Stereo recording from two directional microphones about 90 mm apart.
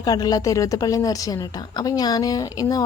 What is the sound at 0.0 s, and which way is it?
A woman's voice, 45° left (ahead or behind).